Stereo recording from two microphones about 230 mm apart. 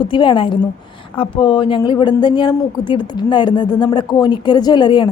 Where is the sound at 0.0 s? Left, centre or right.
Centre.